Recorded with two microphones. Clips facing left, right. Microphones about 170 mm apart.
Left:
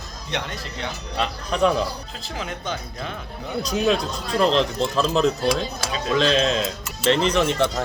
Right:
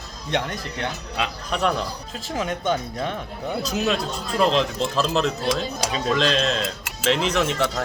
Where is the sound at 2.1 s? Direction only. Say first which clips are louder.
Right 5 dB; 40° right (ahead or behind).